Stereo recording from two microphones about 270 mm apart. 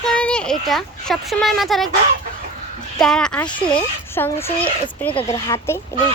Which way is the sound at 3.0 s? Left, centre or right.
Centre.